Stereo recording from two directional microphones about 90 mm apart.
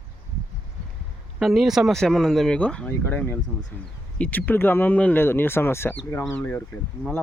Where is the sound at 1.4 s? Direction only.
Centre (ahead or behind); by 6.6 s 25° left (ahead or behind).